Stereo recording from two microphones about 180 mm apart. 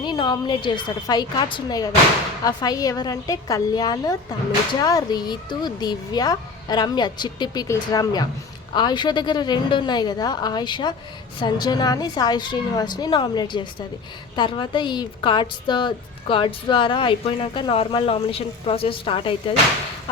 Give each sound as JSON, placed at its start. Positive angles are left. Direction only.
{"t": 0.0, "sound": "a woman's voice", "side_deg": 25}